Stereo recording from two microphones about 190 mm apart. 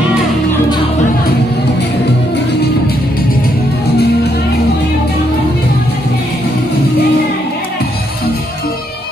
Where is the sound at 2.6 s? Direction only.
55° left (ahead or behind).